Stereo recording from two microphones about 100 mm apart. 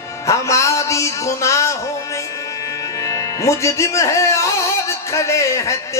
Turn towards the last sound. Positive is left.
turn(degrees=30)  # may be behind; listen again after turning